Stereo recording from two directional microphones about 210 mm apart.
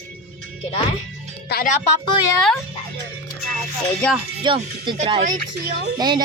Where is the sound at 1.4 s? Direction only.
45° left (ahead or behind).